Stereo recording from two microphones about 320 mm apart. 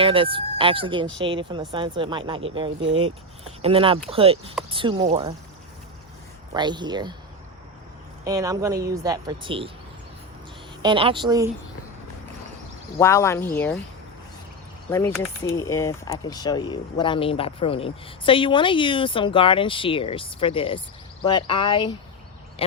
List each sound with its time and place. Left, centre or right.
0.0 s speech: centre
6.5 s speech: centre
8.2 s speech: centre
10.8 s speech: centre
13.0 s speech: centre
14.8 s speech: centre